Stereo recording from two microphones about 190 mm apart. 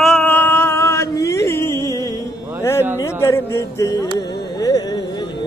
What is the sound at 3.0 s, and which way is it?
Music, 15° left (ahead or behind).